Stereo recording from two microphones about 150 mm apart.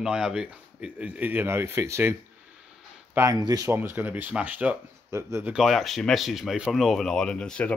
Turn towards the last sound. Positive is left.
turn(degrees=5)  # may be behind; listen again after turning